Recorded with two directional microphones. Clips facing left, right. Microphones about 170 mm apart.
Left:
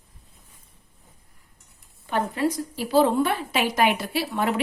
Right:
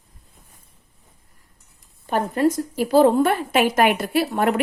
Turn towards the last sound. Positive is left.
turn(degrees=-50)  # may be behind; listen again after turning